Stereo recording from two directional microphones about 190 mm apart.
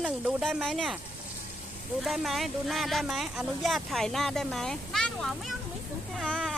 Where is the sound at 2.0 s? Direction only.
Centre (ahead or behind).